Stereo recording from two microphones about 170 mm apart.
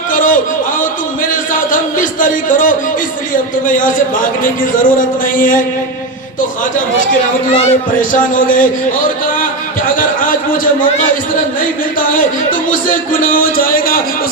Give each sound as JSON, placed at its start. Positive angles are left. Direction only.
{"t": 0.1, "sound": "a sound", "side_deg": 50}
{"t": 3.7, "sound": "music", "side_deg": 50}
{"t": 7.6, "sound": "music", "side_deg": 45}
{"t": 12.7, "sound": "a man's voice", "side_deg": 55}